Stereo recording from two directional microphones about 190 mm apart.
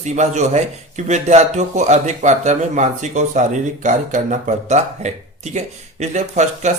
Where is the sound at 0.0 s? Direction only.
40° right (ahead or behind).